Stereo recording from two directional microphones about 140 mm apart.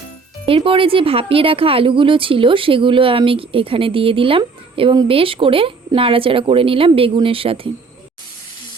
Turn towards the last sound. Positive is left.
turn(degrees=-40)  # may be behind; listen again after turning